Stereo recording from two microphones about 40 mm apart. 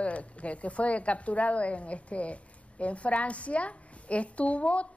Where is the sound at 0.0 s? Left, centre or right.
Left.